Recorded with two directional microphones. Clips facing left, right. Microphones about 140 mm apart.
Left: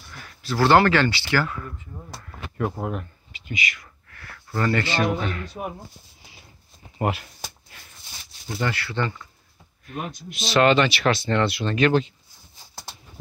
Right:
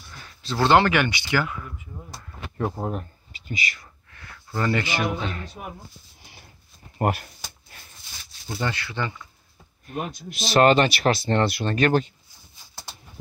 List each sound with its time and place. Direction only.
0.2 s speech: 20° right (ahead or behind)
1.9 s speech: 5° left (ahead or behind)
2.8 s speech: 35° right (ahead or behind)
4.1 s a sound: 20° right (ahead or behind)
5.2 s speech: 25° right (ahead or behind)
7.0 s speech: 45° right (ahead or behind)
8.5 s speech: 15° right (ahead or behind)
9.8 s speech: 40° right (ahead or behind)